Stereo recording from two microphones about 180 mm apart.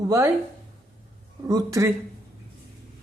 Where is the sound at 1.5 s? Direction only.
20° right (ahead or behind).